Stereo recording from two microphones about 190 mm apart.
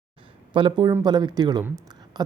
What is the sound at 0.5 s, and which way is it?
Speech, 25° right (ahead or behind).